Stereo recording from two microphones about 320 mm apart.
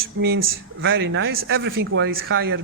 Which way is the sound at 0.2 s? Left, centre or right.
Right.